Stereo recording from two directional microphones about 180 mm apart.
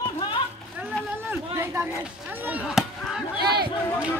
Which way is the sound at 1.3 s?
15° right (ahead or behind).